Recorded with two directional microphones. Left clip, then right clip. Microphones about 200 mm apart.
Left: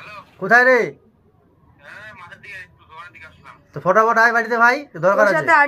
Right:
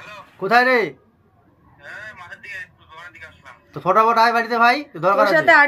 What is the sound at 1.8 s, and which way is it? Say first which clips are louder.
Vehicle: right 2 dB; 10° right (ahead or behind).